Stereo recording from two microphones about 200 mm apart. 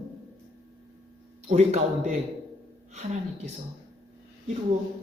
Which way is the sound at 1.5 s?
30° right (ahead or behind).